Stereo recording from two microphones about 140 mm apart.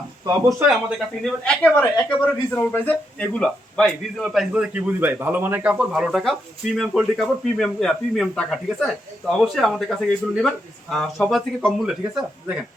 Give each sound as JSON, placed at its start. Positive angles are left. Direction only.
{"t": 0.3, "sound": "speech", "side_deg": -25}
{"t": 0.9, "sound": "speech", "side_deg": 5}